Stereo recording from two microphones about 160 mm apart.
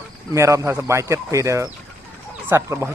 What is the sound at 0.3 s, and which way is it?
Speech, 20° right (ahead or behind).